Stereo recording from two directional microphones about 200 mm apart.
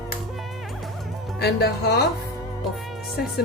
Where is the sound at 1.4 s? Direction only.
55° left (ahead or behind).